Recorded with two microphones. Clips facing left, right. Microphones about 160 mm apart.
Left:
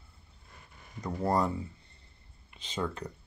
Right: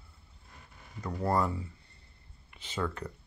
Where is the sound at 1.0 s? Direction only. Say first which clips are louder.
Left 1 dB; 20° left (ahead or behind).